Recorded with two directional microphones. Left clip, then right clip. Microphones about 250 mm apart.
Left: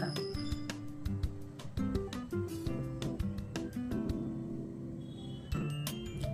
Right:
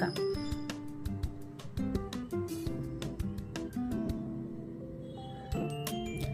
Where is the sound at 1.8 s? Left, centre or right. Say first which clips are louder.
Right 1 dB; centre.